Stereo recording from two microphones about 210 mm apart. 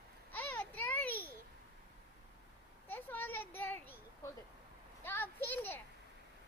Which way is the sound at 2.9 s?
10° left (ahead or behind).